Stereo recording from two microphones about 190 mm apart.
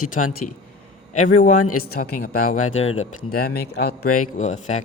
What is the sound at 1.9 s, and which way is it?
Speech, 55° left (ahead or behind).